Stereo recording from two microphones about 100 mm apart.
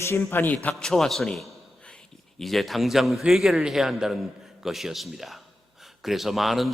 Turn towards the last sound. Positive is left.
turn(degrees=0)  # may be behind; listen again after turning